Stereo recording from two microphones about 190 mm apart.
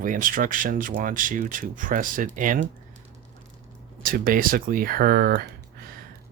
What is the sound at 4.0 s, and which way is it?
Speech, 50° right (ahead or behind).